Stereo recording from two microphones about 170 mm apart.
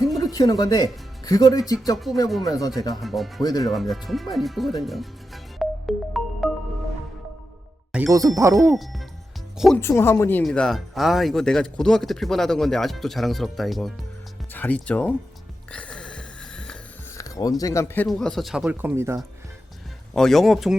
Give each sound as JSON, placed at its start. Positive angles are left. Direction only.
{"t": 0.2, "sound": "speech", "side_deg": 20}
{"t": 2.1, "sound": "speech", "side_deg": 0}
{"t": 2.4, "sound": "speech", "side_deg": 20}
{"t": 2.9, "sound": "speech", "side_deg": 0}
{"t": 3.6, "sound": "music", "side_deg": 0}
{"t": 7.9, "sound": "speech", "side_deg": -5}
{"t": 8.4, "sound": "speech", "side_deg": -20}
{"t": 8.7, "sound": "speech", "side_deg": 0}
{"t": 9.7, "sound": "speech", "side_deg": 15}
{"t": 15.7, "sound": "a sound", "side_deg": 5}
{"t": 17.2, "sound": "a sound", "side_deg": 20}
{"t": 17.6, "sound": "speech", "side_deg": 20}
{"t": 20.1, "sound": "speech", "side_deg": 0}